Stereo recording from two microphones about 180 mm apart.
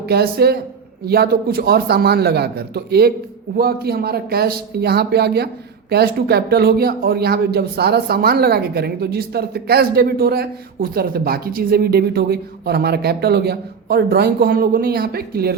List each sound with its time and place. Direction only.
0.0 s speech: 60° right (ahead or behind)